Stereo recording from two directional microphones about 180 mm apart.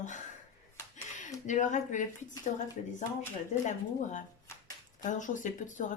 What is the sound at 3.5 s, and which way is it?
Speech, 45° left (ahead or behind).